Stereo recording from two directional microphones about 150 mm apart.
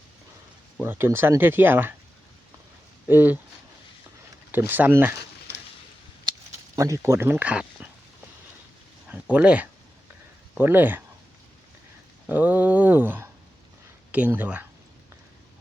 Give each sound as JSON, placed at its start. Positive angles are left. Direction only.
{"t": 0.8, "sound": "speech", "side_deg": -15}
{"t": 3.1, "sound": "speech", "side_deg": -15}
{"t": 4.7, "sound": "speech", "side_deg": -15}
{"t": 6.7, "sound": "speech", "side_deg": -20}
{"t": 9.3, "sound": "speech", "side_deg": -10}
{"t": 12.3, "sound": "a sound", "side_deg": -10}
{"t": 14.1, "sound": "speech", "side_deg": -10}